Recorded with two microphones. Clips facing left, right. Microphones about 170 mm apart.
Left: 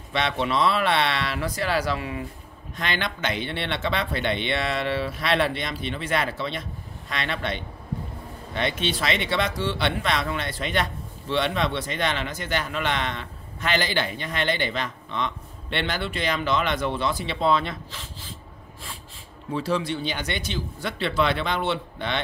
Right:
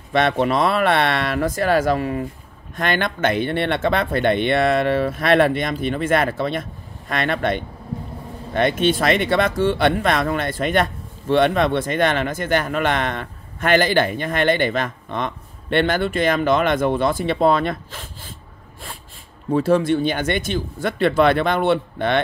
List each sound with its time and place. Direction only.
0.1 s speech: 50° right (ahead or behind)
19.5 s speech: 50° right (ahead or behind)